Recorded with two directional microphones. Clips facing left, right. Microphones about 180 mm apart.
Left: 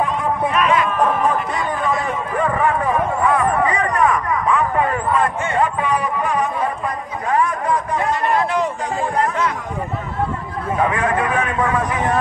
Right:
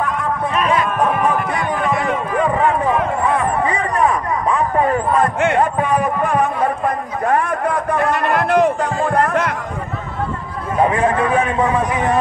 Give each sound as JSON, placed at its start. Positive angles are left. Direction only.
{"t": 0.6, "sound": "music", "side_deg": -35}
{"t": 1.0, "sound": "music", "side_deg": -5}
{"t": 2.3, "sound": "a sound", "side_deg": -20}
{"t": 5.6, "sound": "speech", "side_deg": -50}
{"t": 10.8, "sound": "a man's voice", "side_deg": -30}